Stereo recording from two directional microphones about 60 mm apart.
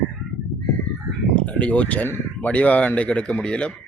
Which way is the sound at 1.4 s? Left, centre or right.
Left.